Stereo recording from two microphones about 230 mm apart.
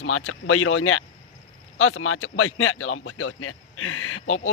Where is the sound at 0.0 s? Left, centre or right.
Left.